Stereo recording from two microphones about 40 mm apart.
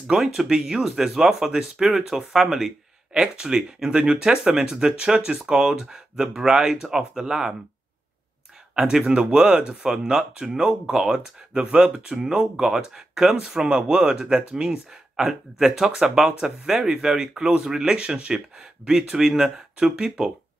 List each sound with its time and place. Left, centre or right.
0.0 s speech: centre
9.3 s speech: right